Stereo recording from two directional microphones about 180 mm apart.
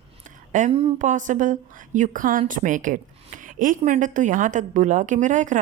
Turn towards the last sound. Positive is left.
turn(degrees=-45)  # may be behind; listen again after turning